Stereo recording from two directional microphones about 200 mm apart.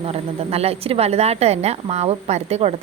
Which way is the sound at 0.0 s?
30° right (ahead or behind).